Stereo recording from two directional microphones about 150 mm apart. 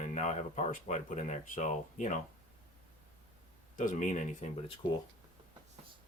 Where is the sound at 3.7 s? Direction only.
60° left (ahead or behind).